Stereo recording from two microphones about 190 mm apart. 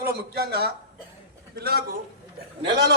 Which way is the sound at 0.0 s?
55° right (ahead or behind).